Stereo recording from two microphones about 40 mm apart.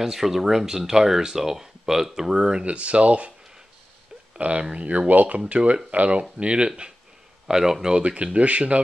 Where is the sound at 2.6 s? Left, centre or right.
Right.